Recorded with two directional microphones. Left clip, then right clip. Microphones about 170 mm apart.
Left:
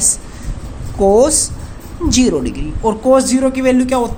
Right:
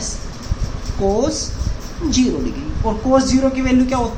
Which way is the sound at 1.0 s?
90° left.